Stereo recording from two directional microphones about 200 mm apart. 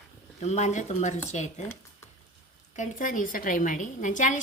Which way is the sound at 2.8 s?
40° left (ahead or behind).